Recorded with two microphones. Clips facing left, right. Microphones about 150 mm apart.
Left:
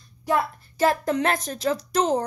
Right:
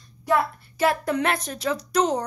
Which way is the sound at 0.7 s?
40° left (ahead or behind).